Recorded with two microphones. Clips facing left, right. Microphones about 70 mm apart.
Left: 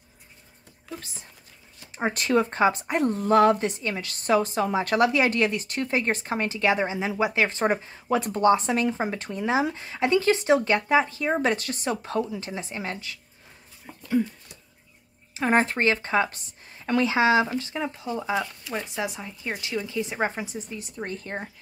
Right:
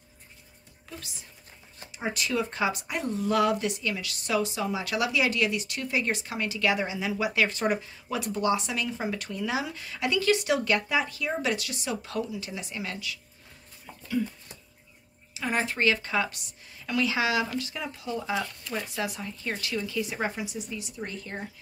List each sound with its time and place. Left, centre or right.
2.0 s a woman's voice: left
3.0 s a woman's voice: left
13.9 s a sound: centre
15.3 s a woman's voice: left